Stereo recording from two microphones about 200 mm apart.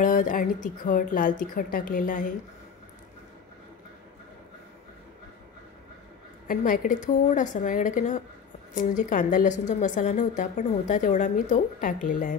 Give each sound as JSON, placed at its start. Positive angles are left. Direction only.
{"t": 0.0, "sound": "speech", "side_deg": 40}
{"t": 6.4, "sound": "a woman's voice", "side_deg": 45}